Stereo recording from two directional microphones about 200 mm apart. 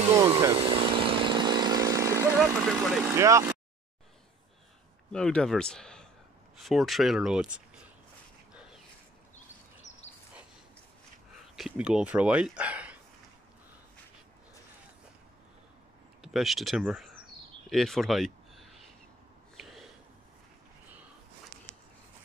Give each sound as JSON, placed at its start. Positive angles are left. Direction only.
{"t": 0.4, "sound": "chainsaw", "side_deg": -25}
{"t": 2.6, "sound": "speech", "side_deg": 0}
{"t": 3.1, "sound": "speech", "side_deg": -15}
{"t": 5.1, "sound": "speech", "side_deg": 5}
{"t": 8.5, "sound": "a sound", "side_deg": -5}
{"t": 11.5, "sound": "speech", "side_deg": -5}
{"t": 16.2, "sound": "speech", "side_deg": 0}
{"t": 17.6, "sound": "a sound", "side_deg": 0}
{"t": 19.5, "sound": "snort", "side_deg": 0}